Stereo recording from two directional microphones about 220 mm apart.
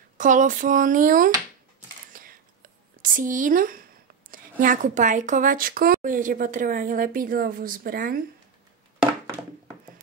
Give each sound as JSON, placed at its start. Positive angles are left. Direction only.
{"t": 0.2, "sound": "speech", "side_deg": -35}
{"t": 2.1, "sound": "whispering", "side_deg": -40}
{"t": 4.3, "sound": "speech", "side_deg": -40}